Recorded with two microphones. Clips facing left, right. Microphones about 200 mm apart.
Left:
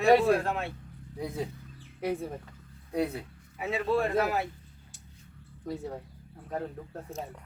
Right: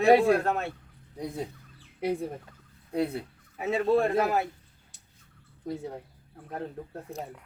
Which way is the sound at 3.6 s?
45° right (ahead or behind).